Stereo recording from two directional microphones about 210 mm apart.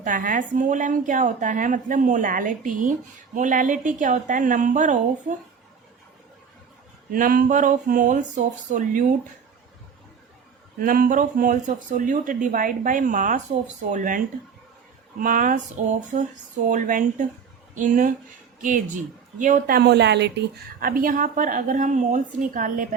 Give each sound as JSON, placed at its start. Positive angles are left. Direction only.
{"t": 0.0, "sound": "a woman's voice", "side_deg": -40}
{"t": 7.1, "sound": "a woman's voice", "side_deg": -40}
{"t": 10.8, "sound": "a woman's voice", "side_deg": -45}
{"t": 15.2, "sound": "a woman's voice", "side_deg": -40}